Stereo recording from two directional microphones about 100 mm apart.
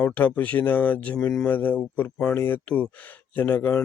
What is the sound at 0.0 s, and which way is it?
A man's voice, 15° left (ahead or behind).